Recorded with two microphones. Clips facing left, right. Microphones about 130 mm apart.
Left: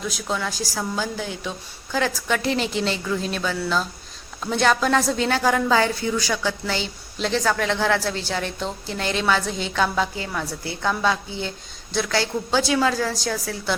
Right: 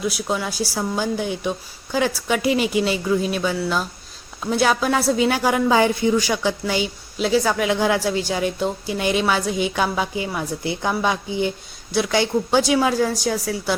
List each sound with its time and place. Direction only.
0.1 s a woman's voice: 10° right (ahead or behind)